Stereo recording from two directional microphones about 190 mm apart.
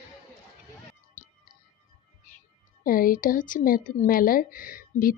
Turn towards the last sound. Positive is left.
turn(degrees=50)  # may be behind; listen again after turning